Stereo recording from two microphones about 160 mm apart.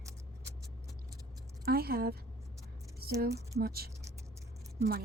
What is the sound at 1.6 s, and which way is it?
A woman's voice, 75° right (ahead or behind).